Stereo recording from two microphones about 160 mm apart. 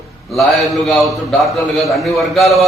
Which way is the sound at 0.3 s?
Centre (ahead or behind).